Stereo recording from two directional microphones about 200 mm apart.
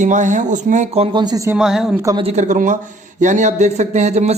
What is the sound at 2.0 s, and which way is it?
Speech, 20° right (ahead or behind).